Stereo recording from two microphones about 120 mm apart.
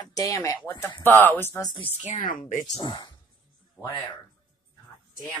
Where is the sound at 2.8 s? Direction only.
35° left (ahead or behind).